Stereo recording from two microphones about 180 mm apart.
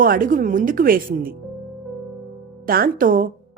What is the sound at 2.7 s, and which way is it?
Speech, 55° right (ahead or behind).